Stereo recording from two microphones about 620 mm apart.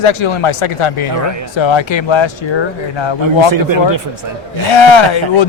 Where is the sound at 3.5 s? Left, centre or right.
Right.